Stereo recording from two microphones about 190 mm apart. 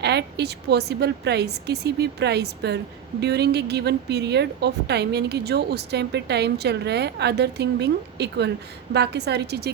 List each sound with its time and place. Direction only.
0.0 s a woman's voice: 60° right (ahead or behind)